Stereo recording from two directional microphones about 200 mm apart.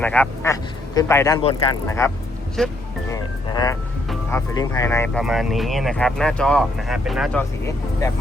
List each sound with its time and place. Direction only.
0.0 s a man's voice: 10° left (ahead or behind)
1.4 s speech: 25° left (ahead or behind)
1.9 s a man's voice: 15° left (ahead or behind)
2.6 s speech: centre (ahead or behind)
3.1 s music: 15° left (ahead or behind)
4.3 s speech: 15° left (ahead or behind); by 7.4 s centre (ahead or behind)